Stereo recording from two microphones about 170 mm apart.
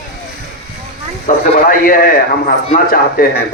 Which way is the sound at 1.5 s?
55° left (ahead or behind).